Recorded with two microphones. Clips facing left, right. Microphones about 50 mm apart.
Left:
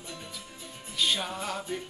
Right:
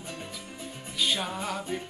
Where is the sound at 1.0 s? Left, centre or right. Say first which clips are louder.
Even; centre.